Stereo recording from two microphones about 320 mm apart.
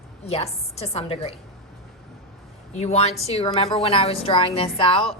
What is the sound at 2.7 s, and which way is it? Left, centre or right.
A woman's voice, centre.